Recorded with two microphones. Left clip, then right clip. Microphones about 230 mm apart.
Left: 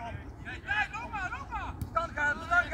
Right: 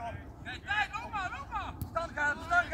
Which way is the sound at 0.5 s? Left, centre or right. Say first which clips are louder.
Left 1 dB; centre.